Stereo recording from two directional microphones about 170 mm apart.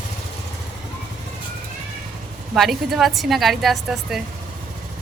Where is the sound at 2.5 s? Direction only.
Centre (ahead or behind).